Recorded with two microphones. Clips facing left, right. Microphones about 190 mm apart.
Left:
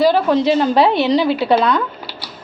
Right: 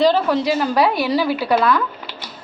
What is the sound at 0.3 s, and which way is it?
A woman's voice, 25° left (ahead or behind).